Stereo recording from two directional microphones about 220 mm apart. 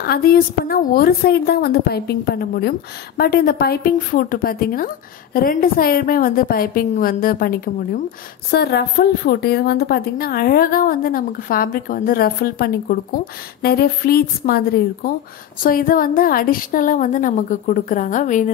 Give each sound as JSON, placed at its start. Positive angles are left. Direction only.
{"t": 0.0, "sound": "a woman's voice", "side_deg": 45}